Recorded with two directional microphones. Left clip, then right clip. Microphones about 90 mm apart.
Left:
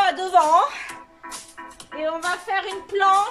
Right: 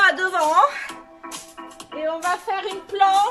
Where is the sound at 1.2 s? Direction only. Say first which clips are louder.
Right 1 dB; 30° right (ahead or behind).